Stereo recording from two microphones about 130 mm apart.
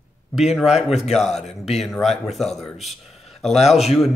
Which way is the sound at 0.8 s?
55° left (ahead or behind).